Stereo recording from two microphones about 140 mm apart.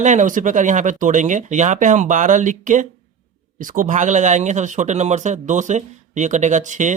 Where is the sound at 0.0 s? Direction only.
60° right (ahead or behind).